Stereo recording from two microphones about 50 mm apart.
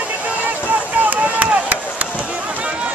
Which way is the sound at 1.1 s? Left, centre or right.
Right.